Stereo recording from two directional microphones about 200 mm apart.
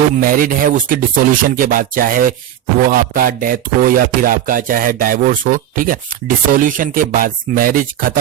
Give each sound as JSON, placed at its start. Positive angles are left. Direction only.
{"t": 0.2, "sound": "speech", "side_deg": -45}